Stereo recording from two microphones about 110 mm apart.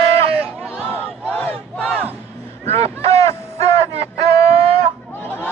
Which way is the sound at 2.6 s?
70° right (ahead or behind).